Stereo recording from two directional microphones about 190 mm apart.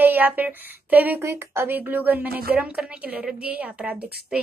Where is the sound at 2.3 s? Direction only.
55° right (ahead or behind).